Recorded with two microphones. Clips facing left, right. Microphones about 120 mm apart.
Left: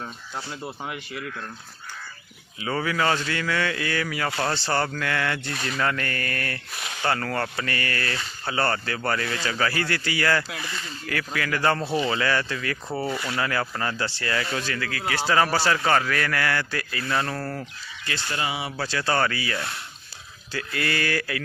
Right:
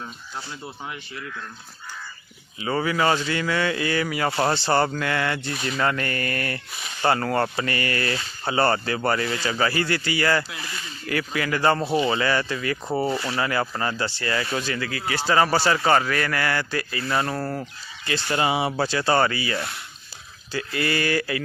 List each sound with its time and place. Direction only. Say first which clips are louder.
0.0 s speech: left 1 dB; 5° left (ahead or behind)
2.6 s speech: right 2 dB; 10° right (ahead or behind)
13.4 s speech: even; 10° right (ahead or behind)
18.1 s speech: right 6 dB; 30° right (ahead or behind)
18.9 s speech: right 1 dB; 15° right (ahead or behind)